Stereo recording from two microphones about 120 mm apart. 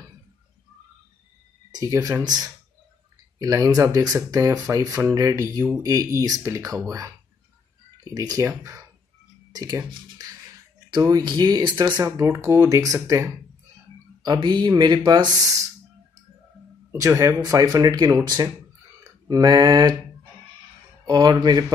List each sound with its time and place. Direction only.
1.7 s speech: 30° right (ahead or behind)
16.9 s speech: 25° right (ahead or behind)
21.1 s speech: 35° right (ahead or behind)